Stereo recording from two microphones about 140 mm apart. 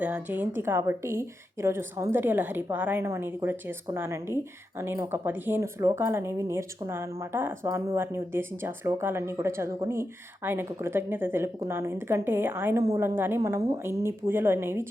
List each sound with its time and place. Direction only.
0.0 s speech: 10° right (ahead or behind)